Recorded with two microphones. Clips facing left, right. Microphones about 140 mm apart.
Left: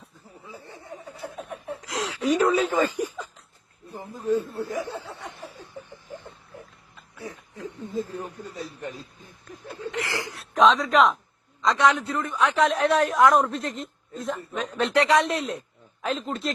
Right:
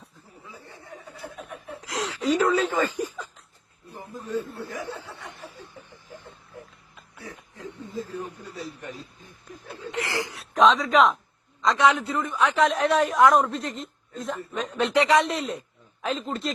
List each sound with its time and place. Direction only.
0.4 s snicker: 25° left (ahead or behind)
1.8 s a sound: centre (ahead or behind)
2.2 s speech: 15° left (ahead or behind)
4.7 s speech: 20° left (ahead or behind)
7.3 s chuckle: 20° left (ahead or behind)
9.9 s a sound: 25° right (ahead or behind)
10.3 s a man's voice: centre (ahead or behind)